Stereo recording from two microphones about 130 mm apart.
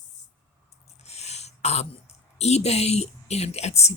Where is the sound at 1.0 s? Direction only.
55° left (ahead or behind).